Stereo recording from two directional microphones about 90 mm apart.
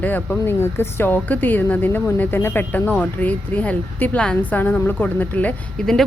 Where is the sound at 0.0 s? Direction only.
20° left (ahead or behind).